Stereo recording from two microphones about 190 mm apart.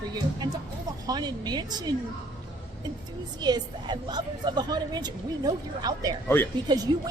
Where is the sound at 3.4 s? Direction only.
20° right (ahead or behind).